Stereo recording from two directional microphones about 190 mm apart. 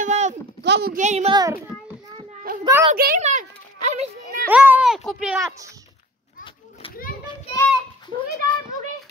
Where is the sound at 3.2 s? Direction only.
40° right (ahead or behind).